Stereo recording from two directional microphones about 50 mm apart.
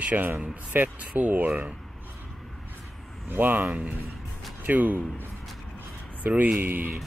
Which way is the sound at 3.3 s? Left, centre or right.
Right.